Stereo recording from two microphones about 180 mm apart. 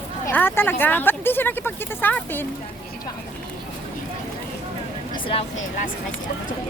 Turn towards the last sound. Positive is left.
turn(degrees=30)  # may be behind; listen again after turning